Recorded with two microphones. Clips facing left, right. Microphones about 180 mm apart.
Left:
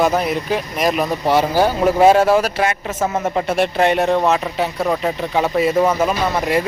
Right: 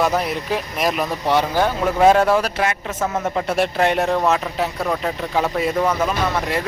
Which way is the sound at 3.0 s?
20° left (ahead or behind).